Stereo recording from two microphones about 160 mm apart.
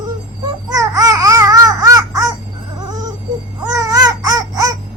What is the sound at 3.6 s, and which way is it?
Babbling, 20° right (ahead or behind).